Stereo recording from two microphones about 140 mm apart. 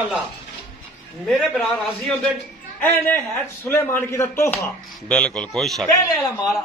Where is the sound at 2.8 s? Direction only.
15° left (ahead or behind).